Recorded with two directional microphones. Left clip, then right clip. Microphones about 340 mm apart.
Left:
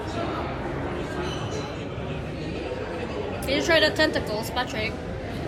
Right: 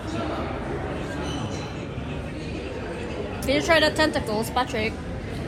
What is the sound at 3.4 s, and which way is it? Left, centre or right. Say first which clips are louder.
A woman's voice: right 1 dB; centre.